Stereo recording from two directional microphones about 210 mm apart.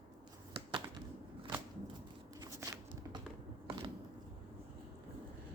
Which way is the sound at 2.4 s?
15° right (ahead or behind).